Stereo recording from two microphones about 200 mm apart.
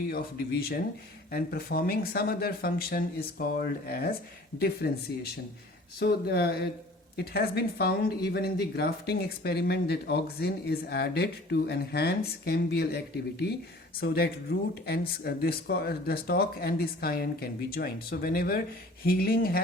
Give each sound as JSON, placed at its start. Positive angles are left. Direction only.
{"t": 0.1, "sound": "speech", "side_deg": 50}
{"t": 14.0, "sound": "speech", "side_deg": 50}